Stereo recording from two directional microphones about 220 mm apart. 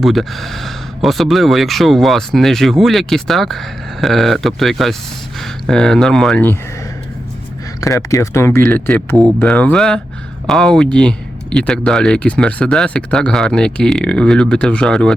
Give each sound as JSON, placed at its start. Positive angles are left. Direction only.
{"t": 0.0, "sound": "speech", "side_deg": 0}
{"t": 7.8, "sound": "speech", "side_deg": 15}